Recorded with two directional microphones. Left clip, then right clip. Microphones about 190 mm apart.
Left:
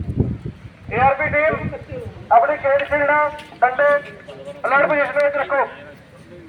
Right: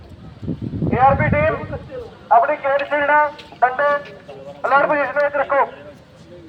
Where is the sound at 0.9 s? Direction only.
45° left (ahead or behind).